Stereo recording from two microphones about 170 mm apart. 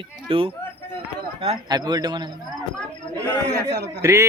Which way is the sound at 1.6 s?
25° right (ahead or behind).